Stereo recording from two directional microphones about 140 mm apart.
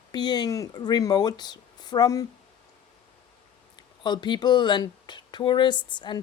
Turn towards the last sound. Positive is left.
turn(degrees=35)  # may be behind; listen again after turning